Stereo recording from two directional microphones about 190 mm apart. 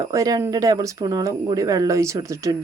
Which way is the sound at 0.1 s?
20° right (ahead or behind).